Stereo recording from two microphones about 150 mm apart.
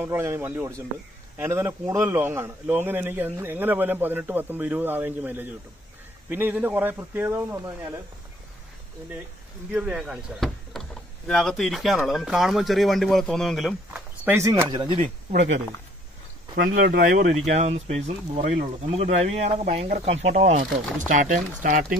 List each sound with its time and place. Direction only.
0.0 s a man's voice: 15° right (ahead or behind)
9.7 s speech: 10° right (ahead or behind)
14.3 s speech: 20° right (ahead or behind)
15.0 s speech: 50° right (ahead or behind)
16.5 s speech: 80° right
17.6 s speech: 50° right (ahead or behind)